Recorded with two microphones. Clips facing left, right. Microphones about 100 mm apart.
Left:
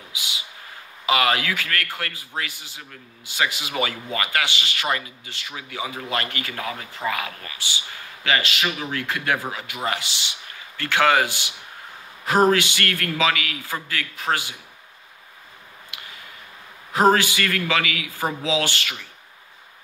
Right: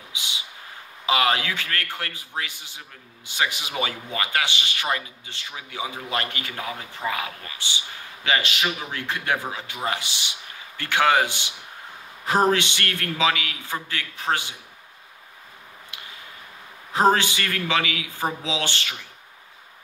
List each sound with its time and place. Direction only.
0.1 s a sound: 25° right (ahead or behind)
1.0 s a man's voice: 20° right (ahead or behind)
16.9 s a man's voice: 20° right (ahead or behind)